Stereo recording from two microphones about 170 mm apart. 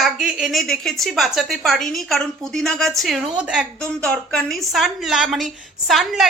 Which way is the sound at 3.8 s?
5° left (ahead or behind).